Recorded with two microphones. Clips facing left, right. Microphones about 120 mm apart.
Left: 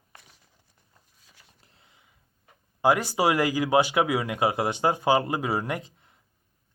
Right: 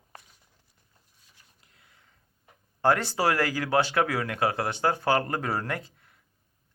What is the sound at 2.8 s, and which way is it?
Speech, 10° left (ahead or behind).